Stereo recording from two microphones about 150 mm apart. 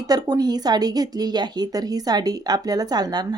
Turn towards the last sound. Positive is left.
turn(degrees=-25)  # may be behind; listen again after turning